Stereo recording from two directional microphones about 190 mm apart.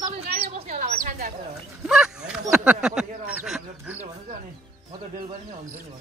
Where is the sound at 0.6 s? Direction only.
35° right (ahead or behind).